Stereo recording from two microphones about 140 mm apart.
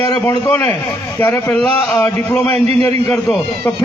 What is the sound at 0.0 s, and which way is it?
A man's voice, 15° left (ahead or behind).